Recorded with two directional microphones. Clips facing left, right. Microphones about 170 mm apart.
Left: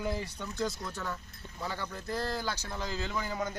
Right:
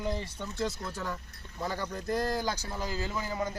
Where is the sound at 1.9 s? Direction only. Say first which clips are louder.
Right 5 dB; 40° right (ahead or behind).